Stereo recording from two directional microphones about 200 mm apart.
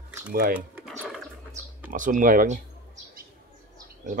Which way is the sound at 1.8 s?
40° right (ahead or behind).